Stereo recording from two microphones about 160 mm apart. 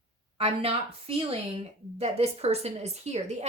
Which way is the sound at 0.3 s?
40° right (ahead or behind).